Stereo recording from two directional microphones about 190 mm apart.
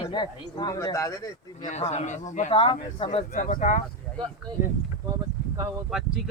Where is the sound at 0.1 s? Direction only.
25° left (ahead or behind).